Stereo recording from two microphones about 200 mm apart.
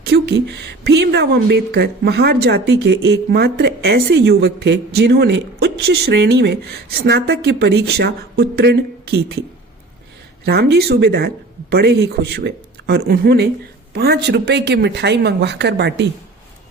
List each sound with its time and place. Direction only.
0.0 s a woman's voice: 60° right (ahead or behind)
10.4 s a woman's voice: 55° right (ahead or behind)